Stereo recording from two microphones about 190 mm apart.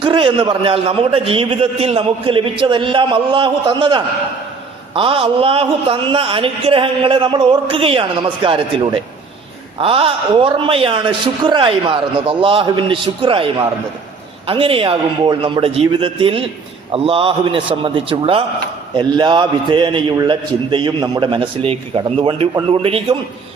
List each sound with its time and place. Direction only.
0.0 s a man's voice: 25° right (ahead or behind)